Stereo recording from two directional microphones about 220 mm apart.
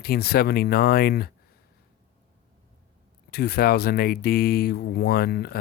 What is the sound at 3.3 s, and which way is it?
Speech, 45° left (ahead or behind).